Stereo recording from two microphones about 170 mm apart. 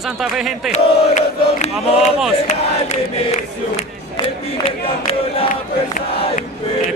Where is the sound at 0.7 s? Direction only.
45° left (ahead or behind).